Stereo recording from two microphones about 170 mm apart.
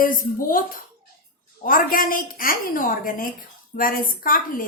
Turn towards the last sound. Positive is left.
turn(degrees=55)  # may be behind; listen again after turning